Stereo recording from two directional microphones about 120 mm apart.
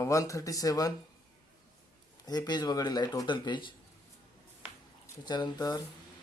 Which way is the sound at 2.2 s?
35° left (ahead or behind).